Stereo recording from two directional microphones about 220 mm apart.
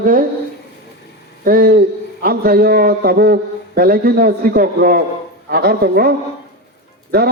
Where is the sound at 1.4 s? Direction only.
40° right (ahead or behind).